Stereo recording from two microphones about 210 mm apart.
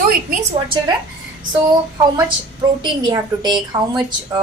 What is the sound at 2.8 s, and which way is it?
A woman's voice, 20° right (ahead or behind).